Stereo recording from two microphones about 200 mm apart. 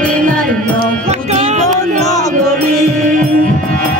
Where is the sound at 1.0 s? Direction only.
35° right (ahead or behind).